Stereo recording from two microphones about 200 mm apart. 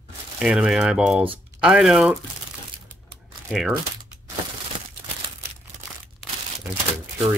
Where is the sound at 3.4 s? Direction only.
Centre (ahead or behind).